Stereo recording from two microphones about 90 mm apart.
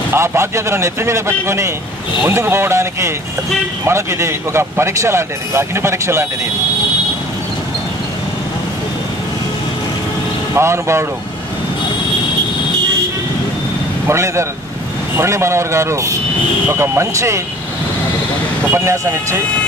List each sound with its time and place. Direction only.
0.1 s speech: 25° right (ahead or behind)
10.5 s speech: 30° right (ahead or behind)
14.0 s speech: 30° right (ahead or behind)
18.7 s speech: 30° right (ahead or behind)